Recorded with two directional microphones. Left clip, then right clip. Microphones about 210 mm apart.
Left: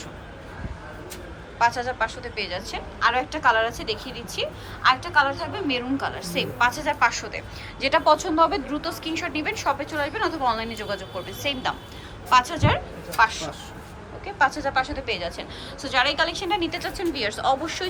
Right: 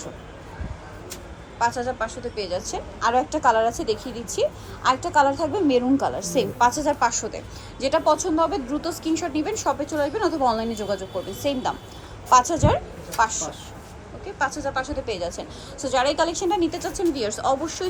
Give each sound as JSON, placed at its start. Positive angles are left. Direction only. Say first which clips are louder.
{"t": 1.5, "sound": "a woman's voice", "louder": "left 1 dB", "side_deg": -20}
{"t": 12.3, "sound": "a woman's voice", "louder": "right 2 dB", "side_deg": -25}